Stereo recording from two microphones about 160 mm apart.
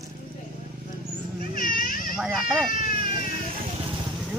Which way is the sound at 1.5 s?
60° left (ahead or behind).